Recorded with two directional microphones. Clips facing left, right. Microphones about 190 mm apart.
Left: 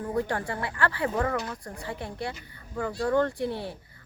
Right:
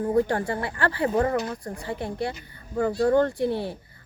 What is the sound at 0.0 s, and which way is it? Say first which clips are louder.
A woman's voice: right 6 dB; 30° right (ahead or behind).